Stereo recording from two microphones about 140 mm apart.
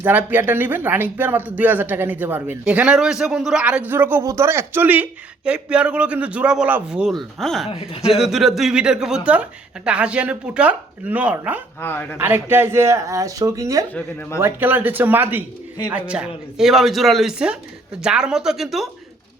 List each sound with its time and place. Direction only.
0.0 s speech: 15° right (ahead or behind)
11.8 s speech: 15° left (ahead or behind)
12.2 s speech: 15° right (ahead or behind)
13.9 s speech: 15° left (ahead or behind)
14.3 s speech: 15° right (ahead or behind)